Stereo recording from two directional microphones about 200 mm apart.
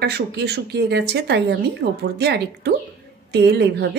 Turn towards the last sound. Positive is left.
turn(degrees=-55)  # may be behind; listen again after turning